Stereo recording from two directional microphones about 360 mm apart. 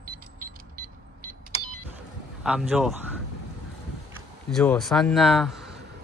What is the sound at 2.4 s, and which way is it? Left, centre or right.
Speech, centre.